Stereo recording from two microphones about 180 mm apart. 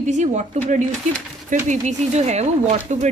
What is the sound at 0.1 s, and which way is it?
A woman's voice, 40° right (ahead or behind).